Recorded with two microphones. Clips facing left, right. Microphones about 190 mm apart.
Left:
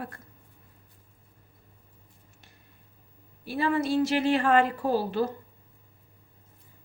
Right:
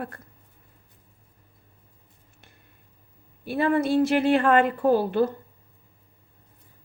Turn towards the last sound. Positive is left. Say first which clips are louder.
# right 5 dB
turn(degrees=-55)  # may be behind; listen again after turning